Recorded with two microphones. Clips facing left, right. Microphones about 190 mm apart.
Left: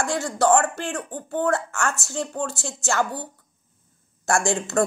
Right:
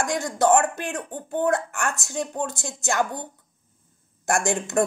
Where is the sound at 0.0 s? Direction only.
20° right (ahead or behind).